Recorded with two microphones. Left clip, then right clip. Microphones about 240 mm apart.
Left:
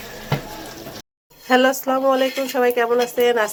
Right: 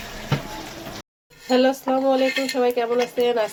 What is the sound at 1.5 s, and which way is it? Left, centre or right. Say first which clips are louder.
Speech: left 3 dB; centre.